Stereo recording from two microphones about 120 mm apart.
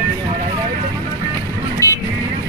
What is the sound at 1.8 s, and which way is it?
Vehicle, 25° left (ahead or behind).